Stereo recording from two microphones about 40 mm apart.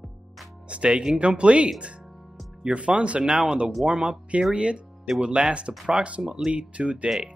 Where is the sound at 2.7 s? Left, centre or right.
Right.